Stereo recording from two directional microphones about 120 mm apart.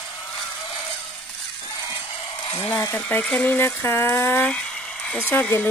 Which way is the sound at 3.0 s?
10° left (ahead or behind).